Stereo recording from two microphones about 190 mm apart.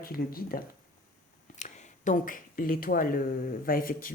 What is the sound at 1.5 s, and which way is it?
Speech, 40° left (ahead or behind).